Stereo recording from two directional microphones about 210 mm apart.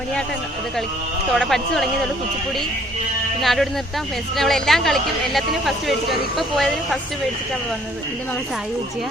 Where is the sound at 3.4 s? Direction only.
Centre (ahead or behind).